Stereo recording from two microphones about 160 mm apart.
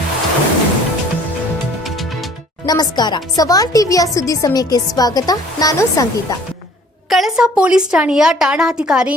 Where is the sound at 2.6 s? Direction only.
25° left (ahead or behind).